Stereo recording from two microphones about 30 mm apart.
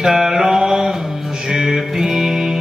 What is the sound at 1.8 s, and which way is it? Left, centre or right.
Music, centre.